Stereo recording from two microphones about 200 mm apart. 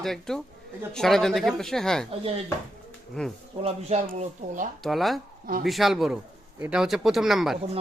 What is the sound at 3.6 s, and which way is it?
Speech, 35° right (ahead or behind).